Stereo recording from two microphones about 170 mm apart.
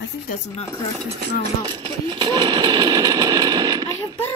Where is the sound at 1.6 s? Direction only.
25° right (ahead or behind).